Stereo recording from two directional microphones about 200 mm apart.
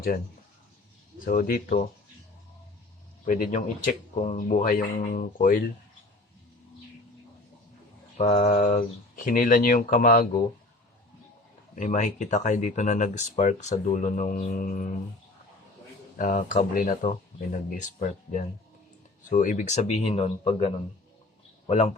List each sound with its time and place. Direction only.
1.2 s speech: 45° left (ahead or behind)
3.2 s speech: 45° left (ahead or behind)
8.2 s speech: 35° left (ahead or behind)
11.7 s speech: 40° left (ahead or behind)
16.1 s speech: 40° left (ahead or behind)